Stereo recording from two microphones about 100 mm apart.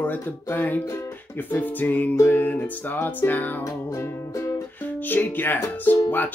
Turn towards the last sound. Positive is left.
turn(degrees=20)  # may be behind; listen again after turning